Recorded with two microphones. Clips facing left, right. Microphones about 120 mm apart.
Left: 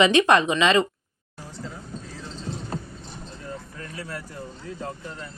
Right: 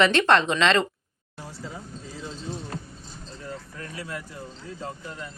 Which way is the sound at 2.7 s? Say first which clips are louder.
Left 4 dB; 30° left (ahead or behind).